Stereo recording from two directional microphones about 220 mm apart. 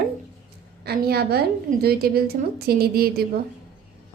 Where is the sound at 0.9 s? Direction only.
45° right (ahead or behind).